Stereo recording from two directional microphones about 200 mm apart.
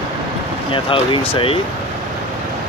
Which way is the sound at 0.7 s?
25° left (ahead or behind).